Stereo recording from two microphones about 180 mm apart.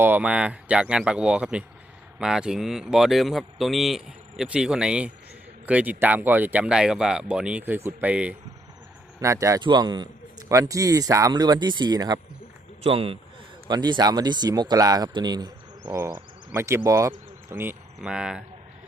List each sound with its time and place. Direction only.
0.0 s speech: 10° right (ahead or behind)
9.2 s speech: 15° right (ahead or behind)